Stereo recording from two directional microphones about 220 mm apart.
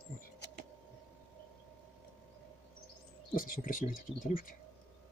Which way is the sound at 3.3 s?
40° left (ahead or behind).